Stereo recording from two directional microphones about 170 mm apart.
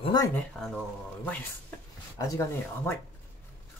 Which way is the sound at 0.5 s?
5° left (ahead or behind).